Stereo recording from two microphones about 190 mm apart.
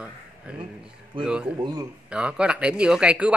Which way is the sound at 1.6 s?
20° right (ahead or behind).